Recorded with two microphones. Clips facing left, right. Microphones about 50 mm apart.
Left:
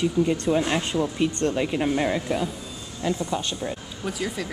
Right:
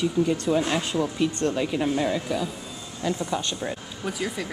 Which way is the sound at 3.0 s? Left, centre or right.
Centre.